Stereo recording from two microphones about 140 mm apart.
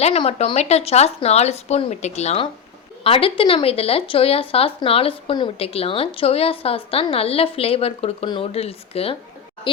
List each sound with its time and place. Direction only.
0.0 s speech: 45° left (ahead or behind)
3.0 s speech: 40° left (ahead or behind)